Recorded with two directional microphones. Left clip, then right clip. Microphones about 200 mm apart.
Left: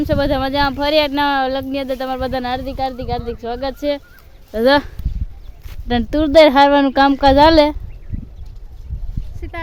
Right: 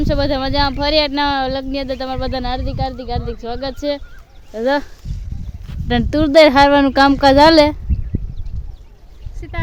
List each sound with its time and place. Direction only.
0.0 s speech: centre (ahead or behind)
4.5 s speech: 50° left (ahead or behind)
5.9 s speech: centre (ahead or behind)
9.4 s clip-clop: centre (ahead or behind)